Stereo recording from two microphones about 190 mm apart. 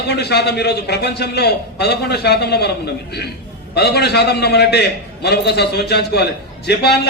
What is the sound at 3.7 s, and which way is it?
A man's voice, 60° left (ahead or behind).